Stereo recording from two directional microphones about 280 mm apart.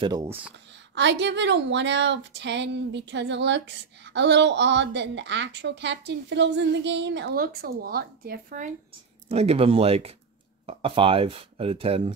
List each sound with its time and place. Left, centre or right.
0.0 s speech: centre
0.9 s a woman's voice: right